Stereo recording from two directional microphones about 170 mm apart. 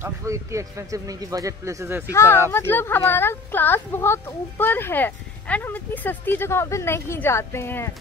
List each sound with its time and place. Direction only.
0.0 s a man's voice: 15° right (ahead or behind)
2.0 s speech: 15° left (ahead or behind)